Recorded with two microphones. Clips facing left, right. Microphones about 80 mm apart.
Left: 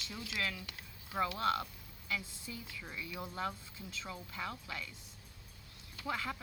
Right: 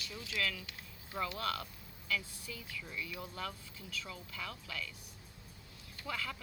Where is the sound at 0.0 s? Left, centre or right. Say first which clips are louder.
Right 1 dB; left.